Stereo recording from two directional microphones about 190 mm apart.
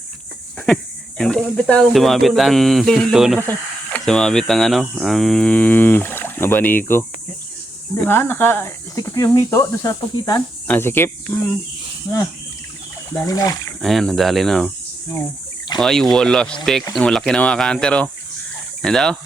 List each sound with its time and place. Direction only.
1.2 s speech: 5° left (ahead or behind)
13.2 s speech: 20° left (ahead or behind)
13.8 s speech: centre (ahead or behind)
15.8 s speech: centre (ahead or behind)